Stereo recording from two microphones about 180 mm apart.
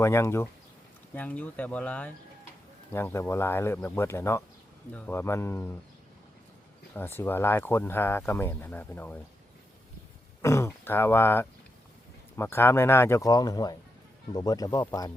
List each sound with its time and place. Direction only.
0.0 s speech: 15° left (ahead or behind)
6.9 s speech: 10° left (ahead or behind)
10.4 s speech: 15° left (ahead or behind)